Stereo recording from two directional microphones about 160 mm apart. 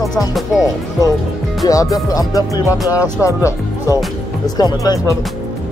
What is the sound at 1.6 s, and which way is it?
Speech, 20° left (ahead or behind).